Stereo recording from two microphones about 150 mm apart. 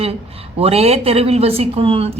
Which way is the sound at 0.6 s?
40° right (ahead or behind).